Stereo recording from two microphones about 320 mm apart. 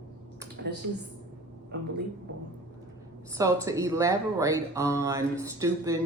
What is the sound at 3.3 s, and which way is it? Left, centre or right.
Speech, centre.